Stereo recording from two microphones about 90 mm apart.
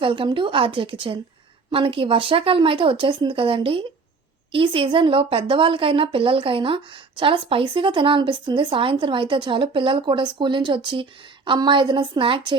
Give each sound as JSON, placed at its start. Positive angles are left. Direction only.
{"t": 0.0, "sound": "a woman's voice", "side_deg": -70}